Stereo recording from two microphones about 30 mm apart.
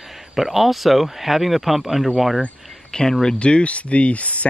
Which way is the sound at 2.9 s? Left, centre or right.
Left.